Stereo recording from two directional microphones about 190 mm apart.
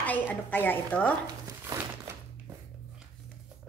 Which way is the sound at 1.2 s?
20° right (ahead or behind).